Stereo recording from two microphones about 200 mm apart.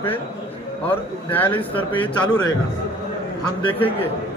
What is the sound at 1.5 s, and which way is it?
Speech, 25° left (ahead or behind).